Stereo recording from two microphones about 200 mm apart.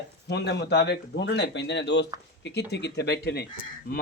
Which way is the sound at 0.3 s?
55° left (ahead or behind).